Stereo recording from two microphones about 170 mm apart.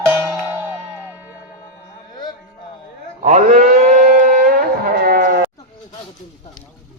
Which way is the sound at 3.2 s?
45° right (ahead or behind).